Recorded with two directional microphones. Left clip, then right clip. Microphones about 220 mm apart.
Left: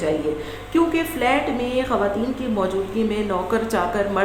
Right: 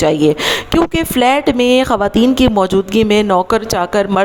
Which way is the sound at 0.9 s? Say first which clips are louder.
Right 7 dB; 50° right (ahead or behind).